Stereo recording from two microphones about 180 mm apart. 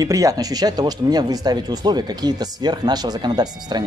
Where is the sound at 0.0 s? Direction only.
20° right (ahead or behind).